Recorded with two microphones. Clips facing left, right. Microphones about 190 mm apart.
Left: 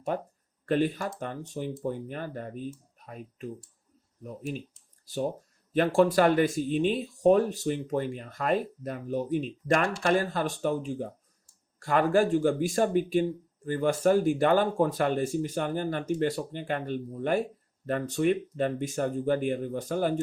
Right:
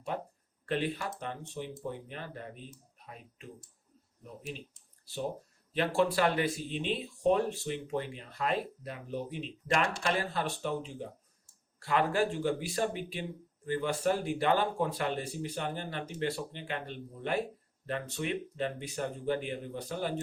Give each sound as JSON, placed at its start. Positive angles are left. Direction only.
{"t": 0.6, "sound": "speech", "side_deg": 45}
{"t": 5.7, "sound": "speech", "side_deg": 45}